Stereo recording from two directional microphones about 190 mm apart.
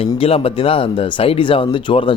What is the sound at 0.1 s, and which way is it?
A man's voice, 30° left (ahead or behind).